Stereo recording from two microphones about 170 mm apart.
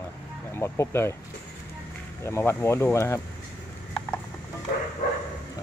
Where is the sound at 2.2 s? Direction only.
15° left (ahead or behind).